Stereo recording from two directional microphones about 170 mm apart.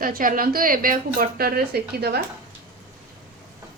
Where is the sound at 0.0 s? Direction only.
55° right (ahead or behind); by 2.2 s 70° right (ahead or behind).